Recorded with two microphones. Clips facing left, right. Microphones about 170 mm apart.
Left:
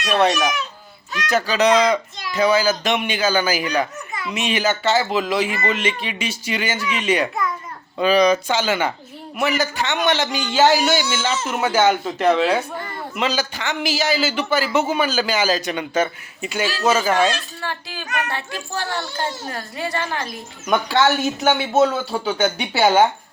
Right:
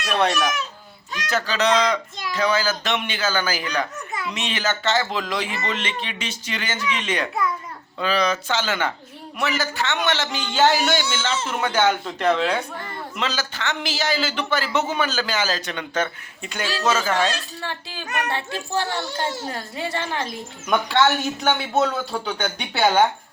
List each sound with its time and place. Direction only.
1.3 s a man's voice: 10° left (ahead or behind)
17.6 s a woman's voice: 25° right (ahead or behind)
20.7 s a man's voice: centre (ahead or behind)